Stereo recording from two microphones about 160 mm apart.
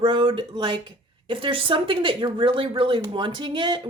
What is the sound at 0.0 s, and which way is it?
Speech, 30° right (ahead or behind).